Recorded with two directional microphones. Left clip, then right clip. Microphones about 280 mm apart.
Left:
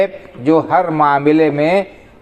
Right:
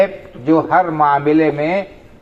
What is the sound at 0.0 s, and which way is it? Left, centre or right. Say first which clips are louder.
A man's voice: even; left.